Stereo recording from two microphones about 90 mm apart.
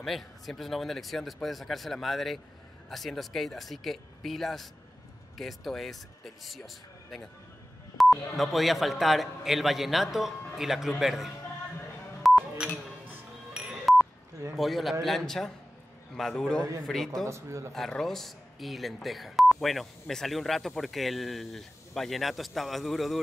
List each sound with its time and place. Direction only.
0.0 s speech: centre (ahead or behind)
12.2 s telephone dialing: centre (ahead or behind)
13.5 s music: 5° right (ahead or behind)
14.5 s a man's voice: centre (ahead or behind)
17.3 s speech: 35° right (ahead or behind)
17.7 s speech: 5° left (ahead or behind)